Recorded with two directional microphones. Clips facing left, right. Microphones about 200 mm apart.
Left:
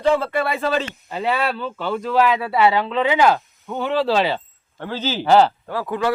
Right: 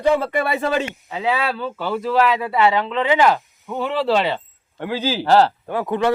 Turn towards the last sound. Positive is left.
turn(degrees=-25)  # may be behind; listen again after turning